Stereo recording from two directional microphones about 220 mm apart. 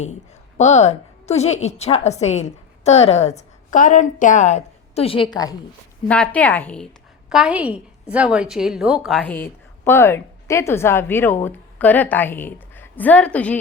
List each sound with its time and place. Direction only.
0.0 s a woman's voice: 30° left (ahead or behind)
6.1 s a woman's voice: 5° left (ahead or behind)
7.3 s a woman's voice: 5° right (ahead or behind)